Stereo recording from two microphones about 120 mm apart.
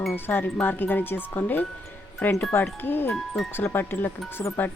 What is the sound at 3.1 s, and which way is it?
Speech, centre (ahead or behind).